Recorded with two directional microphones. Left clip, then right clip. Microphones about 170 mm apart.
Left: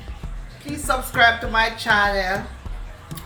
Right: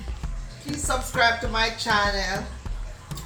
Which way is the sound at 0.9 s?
10° left (ahead or behind).